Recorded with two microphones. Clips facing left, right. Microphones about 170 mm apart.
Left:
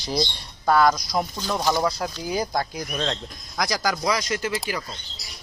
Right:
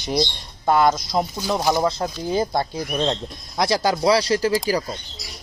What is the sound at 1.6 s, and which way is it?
Speech, 10° right (ahead or behind).